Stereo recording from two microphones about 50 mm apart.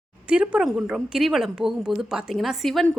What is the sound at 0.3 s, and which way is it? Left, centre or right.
Speech, right.